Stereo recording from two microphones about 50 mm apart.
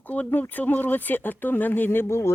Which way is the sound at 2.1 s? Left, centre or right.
Left.